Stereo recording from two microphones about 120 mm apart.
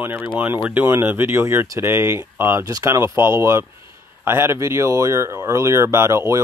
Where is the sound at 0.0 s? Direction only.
15° right (ahead or behind).